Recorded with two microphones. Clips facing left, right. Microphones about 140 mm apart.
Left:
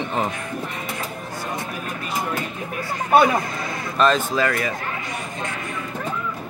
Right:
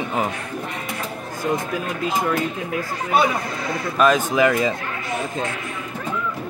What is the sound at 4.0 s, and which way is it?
Speech, 15° right (ahead or behind).